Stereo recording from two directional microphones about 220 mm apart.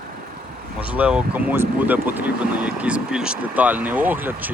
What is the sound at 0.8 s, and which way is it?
Speech, 5° right (ahead or behind).